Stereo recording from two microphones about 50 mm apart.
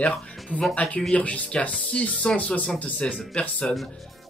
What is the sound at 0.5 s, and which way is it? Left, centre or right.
Speech, left.